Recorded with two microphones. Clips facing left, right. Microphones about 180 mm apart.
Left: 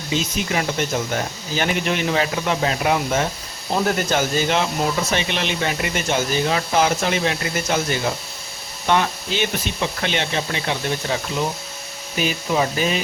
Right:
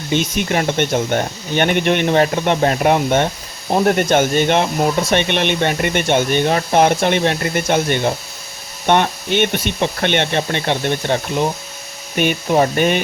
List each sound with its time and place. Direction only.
0.1 s speech: 55° right (ahead or behind)
12.1 s speech: 60° right (ahead or behind)